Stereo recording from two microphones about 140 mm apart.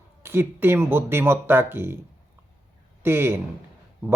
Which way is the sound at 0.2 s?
15° right (ahead or behind).